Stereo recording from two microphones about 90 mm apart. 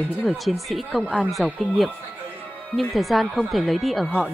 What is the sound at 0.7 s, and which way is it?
Speech, centre (ahead or behind).